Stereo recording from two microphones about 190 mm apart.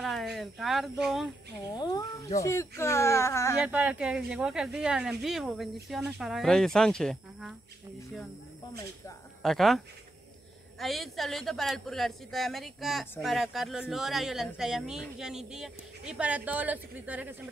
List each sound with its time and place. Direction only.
0.0 s speech: centre (ahead or behind)
1.7 s speech: 20° left (ahead or behind)
3.5 s a man's voice: 5° right (ahead or behind)
9.4 s a man's voice: centre (ahead or behind)
10.8 s a man's voice: centre (ahead or behind)